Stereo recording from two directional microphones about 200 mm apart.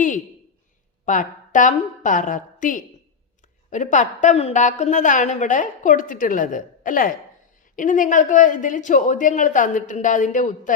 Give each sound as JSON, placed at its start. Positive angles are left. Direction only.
{"t": 1.0, "sound": "a woman's voice", "side_deg": 40}